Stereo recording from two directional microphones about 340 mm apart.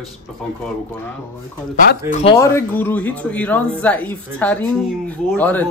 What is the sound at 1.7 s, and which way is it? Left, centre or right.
Speech, left.